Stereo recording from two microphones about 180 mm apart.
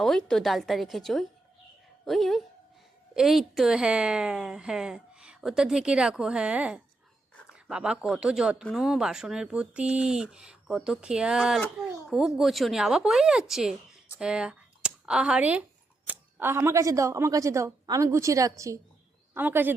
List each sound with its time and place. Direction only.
0.0 s a woman's voice: 5° left (ahead or behind)